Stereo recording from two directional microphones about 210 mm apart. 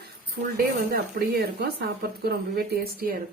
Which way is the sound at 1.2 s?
45° right (ahead or behind).